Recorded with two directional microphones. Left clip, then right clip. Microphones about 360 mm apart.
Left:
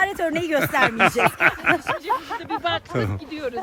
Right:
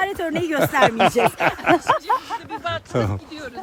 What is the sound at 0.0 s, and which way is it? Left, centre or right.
Speech, centre.